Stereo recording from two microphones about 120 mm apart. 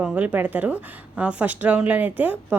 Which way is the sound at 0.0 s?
10° right (ahead or behind).